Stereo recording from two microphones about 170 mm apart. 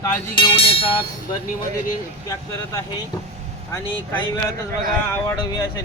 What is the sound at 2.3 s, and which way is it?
Speech, 20° left (ahead or behind).